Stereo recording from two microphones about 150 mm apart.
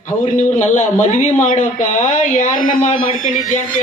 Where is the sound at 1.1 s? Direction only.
55° left (ahead or behind).